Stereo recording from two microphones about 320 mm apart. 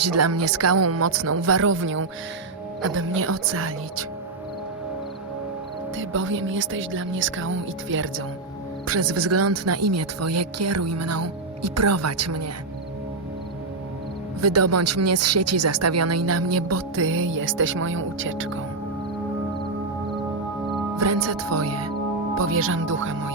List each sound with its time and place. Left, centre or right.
0.0 s speech: right
6.0 s speech: right
14.4 s speech: right
21.0 s speech: right